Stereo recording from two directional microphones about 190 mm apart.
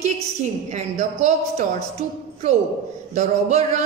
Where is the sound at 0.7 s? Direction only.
35° right (ahead or behind).